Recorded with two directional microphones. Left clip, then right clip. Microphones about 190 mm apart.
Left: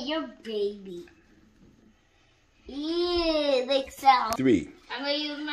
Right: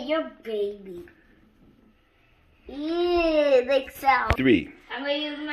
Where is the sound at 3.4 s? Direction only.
45° left (ahead or behind).